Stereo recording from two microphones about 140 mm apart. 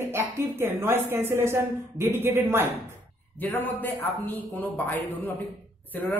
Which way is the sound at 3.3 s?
15° left (ahead or behind).